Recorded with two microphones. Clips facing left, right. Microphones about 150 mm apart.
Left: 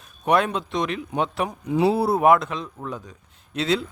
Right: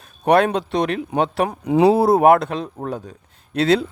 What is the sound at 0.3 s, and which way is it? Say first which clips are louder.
Speech: right 5 dB; 65° right (ahead or behind).